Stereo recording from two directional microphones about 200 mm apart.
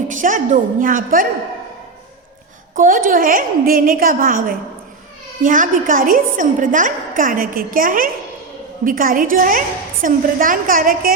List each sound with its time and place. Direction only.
0.1 s a woman's voice: 40° right (ahead or behind)
2.7 s a woman's voice: 40° right (ahead or behind)